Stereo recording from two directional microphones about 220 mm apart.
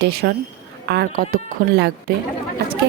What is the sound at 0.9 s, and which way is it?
A woman's voice, 45° right (ahead or behind).